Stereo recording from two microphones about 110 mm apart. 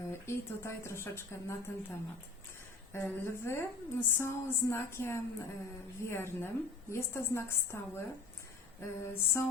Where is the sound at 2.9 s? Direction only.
20° left (ahead or behind).